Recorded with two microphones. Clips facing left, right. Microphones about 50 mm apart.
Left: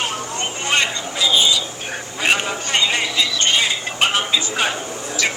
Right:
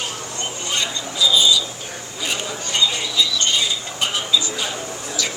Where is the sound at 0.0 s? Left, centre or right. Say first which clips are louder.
Left 4 dB; left.